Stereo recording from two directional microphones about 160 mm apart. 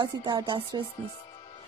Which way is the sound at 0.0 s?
30° right (ahead or behind).